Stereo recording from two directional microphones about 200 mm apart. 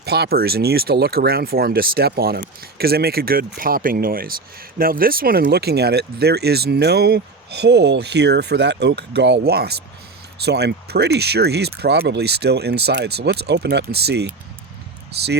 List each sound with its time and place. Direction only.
0.0 s speech: 55° right (ahead or behind)